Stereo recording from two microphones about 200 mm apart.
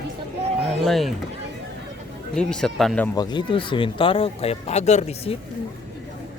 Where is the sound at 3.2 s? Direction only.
20° left (ahead or behind).